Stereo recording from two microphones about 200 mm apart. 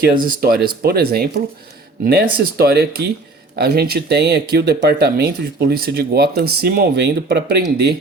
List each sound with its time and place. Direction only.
0.0 s speech: 45° right (ahead or behind)